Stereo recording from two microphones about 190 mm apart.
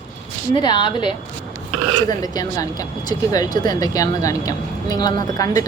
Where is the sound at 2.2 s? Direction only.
20° left (ahead or behind).